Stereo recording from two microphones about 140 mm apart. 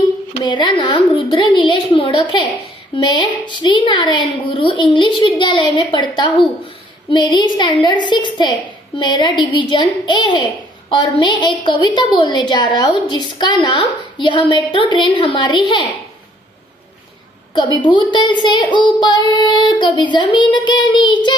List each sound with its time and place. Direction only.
0.4 s a child's voice: 35° left (ahead or behind)
17.9 s a child's voice: 35° left (ahead or behind)